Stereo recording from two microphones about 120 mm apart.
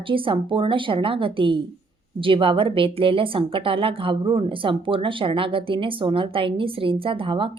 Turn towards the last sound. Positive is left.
turn(degrees=-45)  # may be behind; listen again after turning